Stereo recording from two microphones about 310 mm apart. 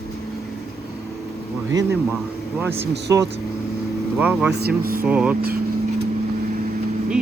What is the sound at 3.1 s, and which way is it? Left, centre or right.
Speech, centre.